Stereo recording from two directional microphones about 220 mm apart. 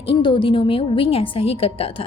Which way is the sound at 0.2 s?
20° left (ahead or behind).